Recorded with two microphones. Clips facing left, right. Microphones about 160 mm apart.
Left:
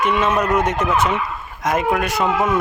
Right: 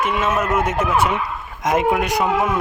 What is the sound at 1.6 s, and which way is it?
Speech, 20° right (ahead or behind).